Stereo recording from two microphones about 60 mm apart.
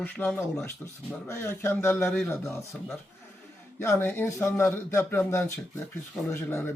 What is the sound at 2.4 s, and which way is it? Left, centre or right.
Speech, left.